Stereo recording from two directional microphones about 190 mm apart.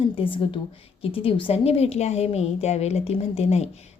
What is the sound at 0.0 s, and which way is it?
A woman's voice, 30° left (ahead or behind).